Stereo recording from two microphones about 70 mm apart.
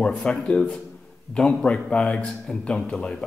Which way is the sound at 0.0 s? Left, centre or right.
Centre.